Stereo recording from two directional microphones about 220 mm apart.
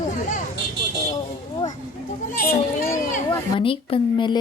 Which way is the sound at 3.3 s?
20° left (ahead or behind).